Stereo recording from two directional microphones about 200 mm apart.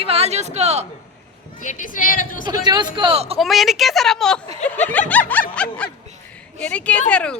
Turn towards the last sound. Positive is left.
turn(degrees=5)  # may be behind; listen again after turning